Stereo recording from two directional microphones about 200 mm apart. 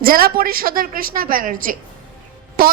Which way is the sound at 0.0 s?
45° right (ahead or behind).